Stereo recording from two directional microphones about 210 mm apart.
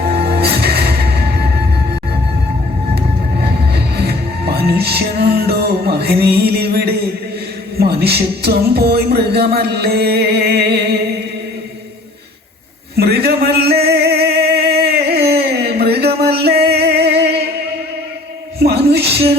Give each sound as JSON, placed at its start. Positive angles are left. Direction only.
{"t": 0.0, "sound": "music", "side_deg": -50}
{"t": 3.9, "sound": "music", "side_deg": -50}
{"t": 7.8, "sound": "speech", "side_deg": -50}
{"t": 13.0, "sound": "a sound", "side_deg": -50}
{"t": 16.2, "sound": "music", "side_deg": -50}
{"t": 18.6, "sound": "a sound", "side_deg": -50}